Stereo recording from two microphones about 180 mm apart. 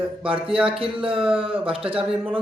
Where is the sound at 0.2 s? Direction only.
30° right (ahead or behind).